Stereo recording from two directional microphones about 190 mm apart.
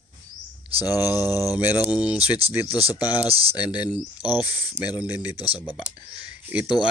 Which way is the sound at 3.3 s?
30° right (ahead or behind).